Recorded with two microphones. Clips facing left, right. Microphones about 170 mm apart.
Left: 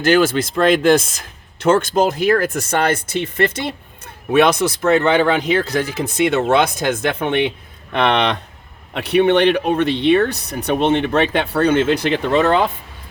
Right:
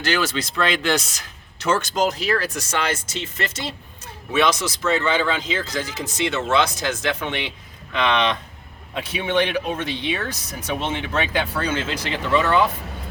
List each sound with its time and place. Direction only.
0.0 s speech: 50° left (ahead or behind)